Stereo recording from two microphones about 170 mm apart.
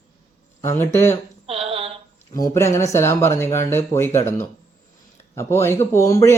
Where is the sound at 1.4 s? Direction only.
35° right (ahead or behind).